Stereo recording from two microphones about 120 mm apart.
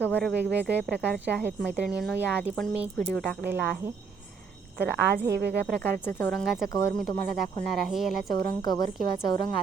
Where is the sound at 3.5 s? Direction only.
15° right (ahead or behind).